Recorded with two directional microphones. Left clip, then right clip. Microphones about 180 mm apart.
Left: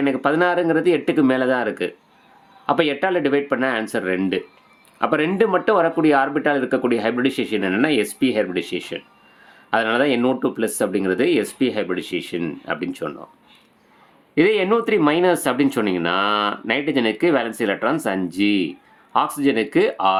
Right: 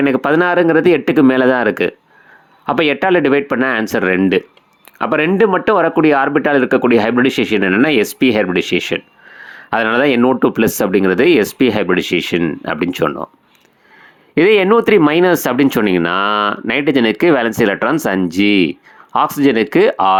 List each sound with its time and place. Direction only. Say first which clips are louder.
0.0 s speech: right 5 dB; 40° right (ahead or behind)
14.3 s speech: right 7 dB; 40° right (ahead or behind)